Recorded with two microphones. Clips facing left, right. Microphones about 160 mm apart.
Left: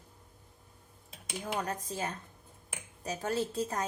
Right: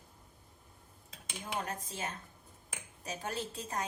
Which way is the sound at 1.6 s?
40° left (ahead or behind).